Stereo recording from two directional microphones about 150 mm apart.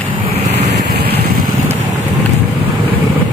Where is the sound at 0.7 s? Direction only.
90° right.